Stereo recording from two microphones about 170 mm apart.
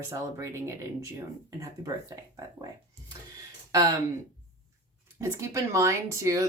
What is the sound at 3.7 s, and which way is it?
Speech, 20° right (ahead or behind).